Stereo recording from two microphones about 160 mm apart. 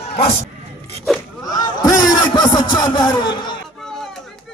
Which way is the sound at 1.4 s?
25° left (ahead or behind).